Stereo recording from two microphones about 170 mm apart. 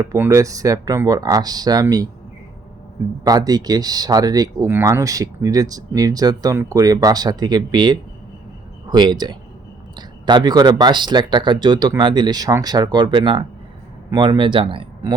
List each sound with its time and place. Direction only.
0.0 s speech: 20° right (ahead or behind)
3.2 s speech: 20° right (ahead or behind)